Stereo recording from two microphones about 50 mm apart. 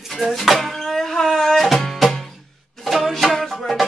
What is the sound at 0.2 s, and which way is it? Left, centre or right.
Music, centre.